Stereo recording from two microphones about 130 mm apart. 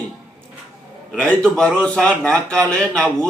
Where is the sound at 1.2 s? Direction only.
5° left (ahead or behind).